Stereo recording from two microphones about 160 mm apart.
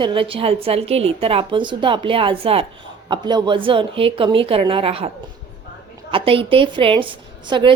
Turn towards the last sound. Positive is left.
turn(degrees=-30)  # may be behind; listen again after turning